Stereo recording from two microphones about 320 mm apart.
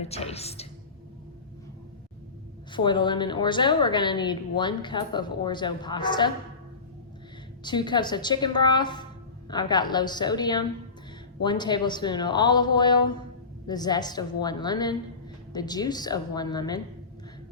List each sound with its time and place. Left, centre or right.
0.0 s a woman's voice: centre
2.7 s a woman's voice: centre
7.6 s a woman's voice: centre